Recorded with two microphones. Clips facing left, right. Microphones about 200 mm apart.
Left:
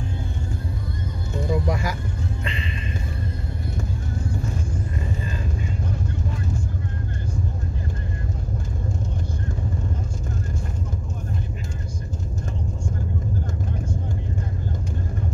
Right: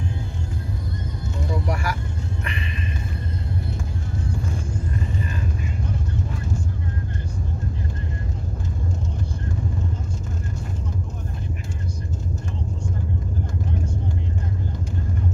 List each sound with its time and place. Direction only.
1.5 s vehicle: 20° left (ahead or behind)